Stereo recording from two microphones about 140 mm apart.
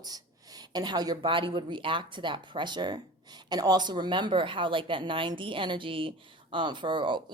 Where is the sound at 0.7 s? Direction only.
30° right (ahead or behind).